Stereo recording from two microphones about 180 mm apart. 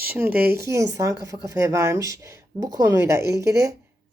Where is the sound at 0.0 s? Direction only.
10° right (ahead or behind).